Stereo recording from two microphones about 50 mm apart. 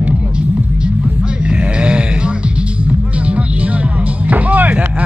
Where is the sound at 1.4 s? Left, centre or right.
Right.